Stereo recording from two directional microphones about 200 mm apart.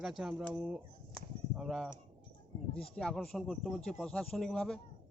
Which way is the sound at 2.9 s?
5° left (ahead or behind).